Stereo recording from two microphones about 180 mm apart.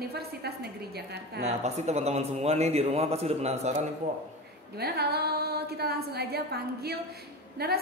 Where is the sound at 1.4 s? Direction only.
35° right (ahead or behind).